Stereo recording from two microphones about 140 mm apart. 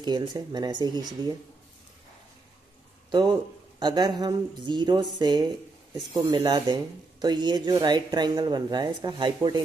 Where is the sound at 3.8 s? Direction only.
30° right (ahead or behind).